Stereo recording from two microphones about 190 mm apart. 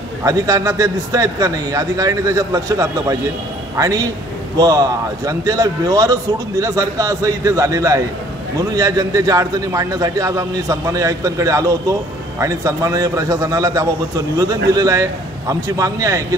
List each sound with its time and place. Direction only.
0.2 s a man's voice: 20° right (ahead or behind)